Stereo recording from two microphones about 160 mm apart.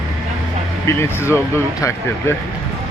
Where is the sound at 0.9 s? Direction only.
15° left (ahead or behind).